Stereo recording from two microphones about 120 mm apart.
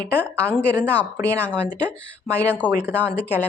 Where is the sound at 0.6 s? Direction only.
15° left (ahead or behind).